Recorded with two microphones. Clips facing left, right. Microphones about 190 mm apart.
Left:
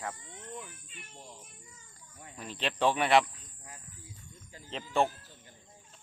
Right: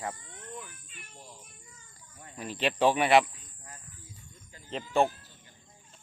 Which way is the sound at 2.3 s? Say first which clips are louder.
Right 5 dB; 5° right (ahead or behind).